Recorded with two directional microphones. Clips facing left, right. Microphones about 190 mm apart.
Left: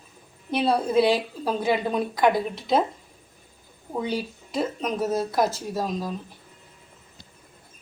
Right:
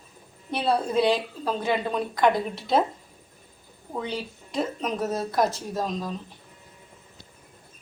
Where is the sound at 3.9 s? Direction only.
10° left (ahead or behind).